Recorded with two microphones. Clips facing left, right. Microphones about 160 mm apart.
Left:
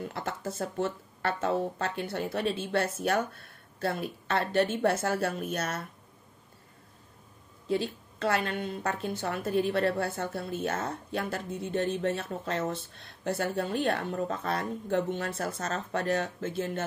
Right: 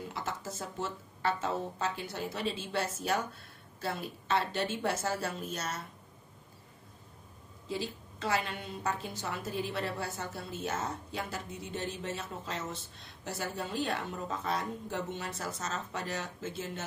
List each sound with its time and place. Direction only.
0.1 s a woman's voice: 55° left (ahead or behind)
7.6 s a woman's voice: 60° left (ahead or behind)